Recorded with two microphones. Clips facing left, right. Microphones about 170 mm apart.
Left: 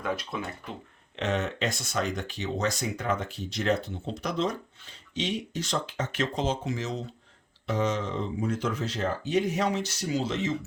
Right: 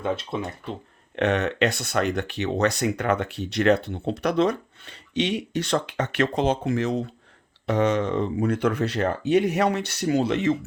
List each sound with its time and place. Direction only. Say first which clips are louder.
0.0 s speech: right 5 dB; 25° right (ahead or behind)
1.1 s speech: right 6 dB; 65° right (ahead or behind)